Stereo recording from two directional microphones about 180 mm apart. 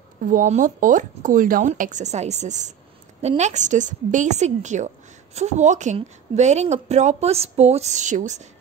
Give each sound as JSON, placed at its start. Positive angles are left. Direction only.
{"t": 0.2, "sound": "a woman's voice", "side_deg": -50}